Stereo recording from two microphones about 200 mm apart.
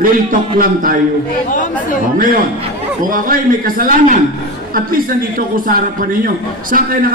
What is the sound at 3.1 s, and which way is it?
A man's voice, 45° right (ahead or behind).